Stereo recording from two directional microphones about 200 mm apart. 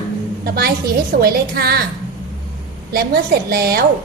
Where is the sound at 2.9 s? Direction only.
50° right (ahead or behind).